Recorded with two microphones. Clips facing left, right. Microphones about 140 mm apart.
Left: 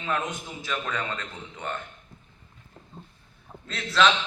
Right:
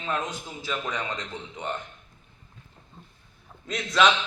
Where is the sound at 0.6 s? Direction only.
10° right (ahead or behind).